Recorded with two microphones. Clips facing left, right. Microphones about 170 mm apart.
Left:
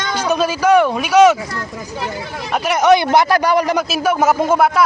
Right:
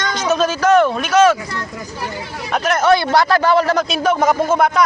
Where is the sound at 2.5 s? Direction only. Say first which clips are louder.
Left 2 dB; 10° left (ahead or behind).